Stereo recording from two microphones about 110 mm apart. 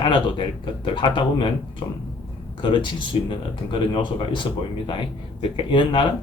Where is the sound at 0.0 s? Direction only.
50° left (ahead or behind).